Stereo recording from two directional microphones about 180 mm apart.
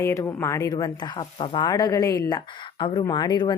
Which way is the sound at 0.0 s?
15° left (ahead or behind).